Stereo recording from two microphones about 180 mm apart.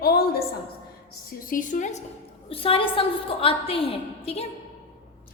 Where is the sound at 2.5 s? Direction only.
30° left (ahead or behind).